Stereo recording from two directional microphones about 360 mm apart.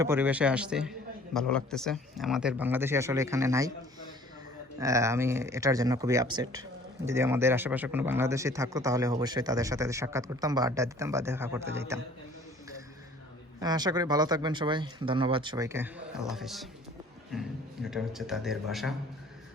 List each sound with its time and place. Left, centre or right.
0.0 s a man's voice: centre
4.8 s speech: centre
13.6 s a man's voice: centre